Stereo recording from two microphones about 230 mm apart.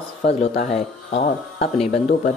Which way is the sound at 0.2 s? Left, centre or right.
Left.